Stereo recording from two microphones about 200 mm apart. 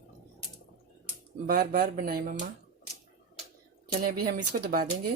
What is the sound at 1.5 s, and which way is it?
Speech, 45° right (ahead or behind).